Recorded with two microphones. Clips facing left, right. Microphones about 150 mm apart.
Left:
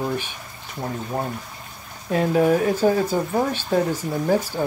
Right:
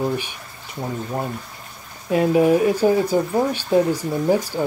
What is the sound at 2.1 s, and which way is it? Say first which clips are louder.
Speech: right 2 dB; 10° right (ahead or behind).